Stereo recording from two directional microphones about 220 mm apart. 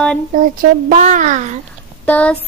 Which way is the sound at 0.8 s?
35° right (ahead or behind).